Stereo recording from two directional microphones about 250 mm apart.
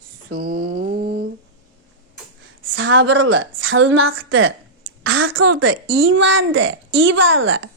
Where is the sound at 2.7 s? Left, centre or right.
Right.